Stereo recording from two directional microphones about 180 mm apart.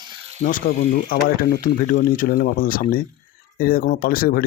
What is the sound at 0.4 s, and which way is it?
Speech, 50° left (ahead or behind).